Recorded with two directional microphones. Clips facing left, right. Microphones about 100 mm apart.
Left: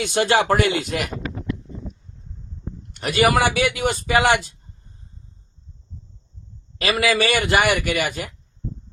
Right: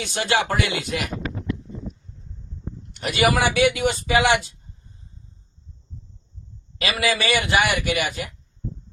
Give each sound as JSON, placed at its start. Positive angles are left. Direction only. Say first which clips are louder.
{"t": 0.0, "sound": "a man's voice", "louder": "left 4 dB", "side_deg": 50}
{"t": 1.6, "sound": "a sound", "louder": "right 1 dB", "side_deg": 0}
{"t": 2.9, "sound": "a man's voice", "louder": "left 2 dB", "side_deg": 45}
{"t": 6.7, "sound": "a man's voice", "louder": "left 3 dB", "side_deg": 45}